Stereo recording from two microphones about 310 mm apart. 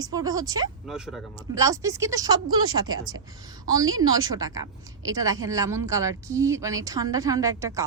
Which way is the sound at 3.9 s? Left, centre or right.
Right.